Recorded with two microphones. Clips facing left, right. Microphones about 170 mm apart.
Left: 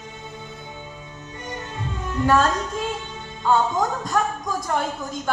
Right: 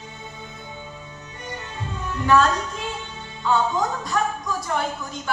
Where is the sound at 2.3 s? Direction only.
45° left (ahead or behind).